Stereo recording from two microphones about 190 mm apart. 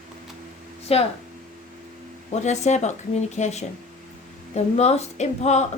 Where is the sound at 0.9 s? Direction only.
30° left (ahead or behind).